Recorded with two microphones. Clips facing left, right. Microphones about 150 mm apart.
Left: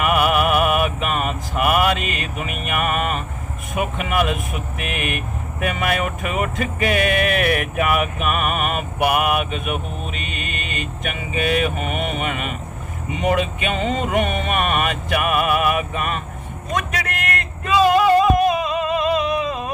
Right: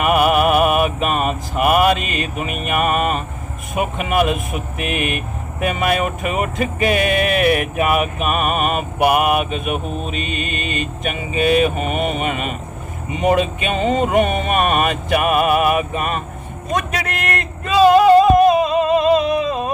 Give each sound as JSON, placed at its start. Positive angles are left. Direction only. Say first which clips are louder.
{"t": 0.0, "sound": "mantra", "louder": "right 3 dB", "side_deg": -25}
{"t": 3.8, "sound": "speech", "louder": "right 3 dB", "side_deg": -25}
{"t": 13.8, "sound": "music", "louder": "right 6 dB", "side_deg": -25}
{"t": 16.7, "sound": "a sound", "louder": "right 3 dB", "side_deg": -30}